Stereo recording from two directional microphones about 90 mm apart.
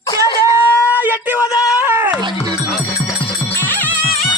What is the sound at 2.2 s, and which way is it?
Speech, 55° right (ahead or behind).